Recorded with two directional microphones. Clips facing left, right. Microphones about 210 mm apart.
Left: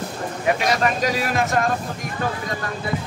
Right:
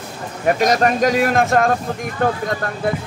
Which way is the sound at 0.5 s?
45° right (ahead or behind).